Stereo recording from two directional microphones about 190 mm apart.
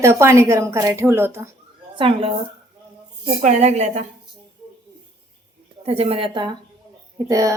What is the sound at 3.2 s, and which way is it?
Speech, 40° right (ahead or behind).